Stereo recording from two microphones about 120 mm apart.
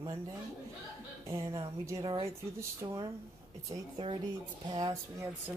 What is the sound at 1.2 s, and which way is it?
Speech, 25° right (ahead or behind).